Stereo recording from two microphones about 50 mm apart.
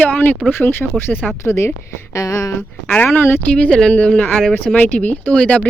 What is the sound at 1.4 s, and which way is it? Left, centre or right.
Speech, left.